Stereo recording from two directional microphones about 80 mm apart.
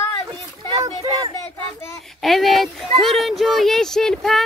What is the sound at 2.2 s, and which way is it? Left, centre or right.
Speech, centre.